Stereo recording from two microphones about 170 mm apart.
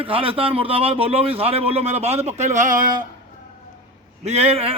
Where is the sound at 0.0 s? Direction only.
30° right (ahead or behind); by 3.1 s 50° right (ahead or behind).